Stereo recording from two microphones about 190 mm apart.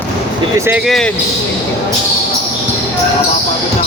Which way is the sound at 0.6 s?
5° right (ahead or behind).